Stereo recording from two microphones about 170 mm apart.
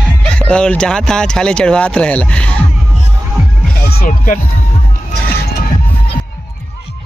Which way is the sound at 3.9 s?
60° left (ahead or behind).